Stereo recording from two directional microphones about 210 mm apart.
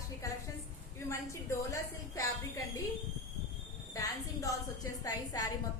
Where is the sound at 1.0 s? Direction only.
15° left (ahead or behind).